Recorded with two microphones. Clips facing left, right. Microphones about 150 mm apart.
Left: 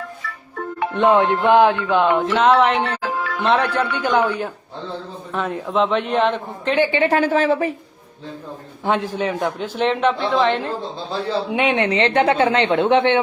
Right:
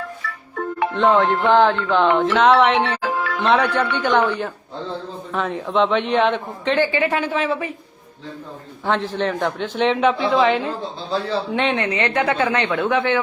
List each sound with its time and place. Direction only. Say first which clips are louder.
0.9 s a man's voice: left 1 dB; 15° left (ahead or behind); by 6.7 s centre (ahead or behind)
6.7 s a woman's voice: left 2 dB; 20° left (ahead or behind)
7.1 s a woman's voice: left 5 dB; 40° left (ahead or behind)
8.8 s a man's voice: even; 15° left (ahead or behind)
11.5 s speech: left 2 dB; 10° left (ahead or behind)
11.8 s a woman's voice: left 4 dB; 25° left (ahead or behind)